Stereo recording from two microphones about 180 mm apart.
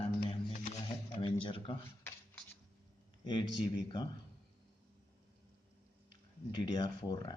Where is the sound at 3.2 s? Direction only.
25° left (ahead or behind).